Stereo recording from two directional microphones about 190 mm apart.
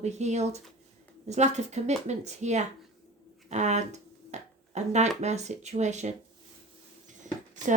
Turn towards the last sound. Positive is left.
turn(degrees=-40)  # may be behind; listen again after turning